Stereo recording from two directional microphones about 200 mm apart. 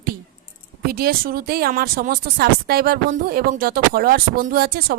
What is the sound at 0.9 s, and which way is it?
A woman's voice, 50° right (ahead or behind).